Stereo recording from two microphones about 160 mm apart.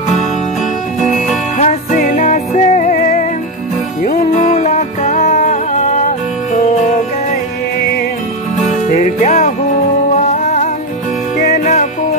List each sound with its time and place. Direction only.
1.6 s music: 50° left (ahead or behind)
8.6 s music: 50° left (ahead or behind)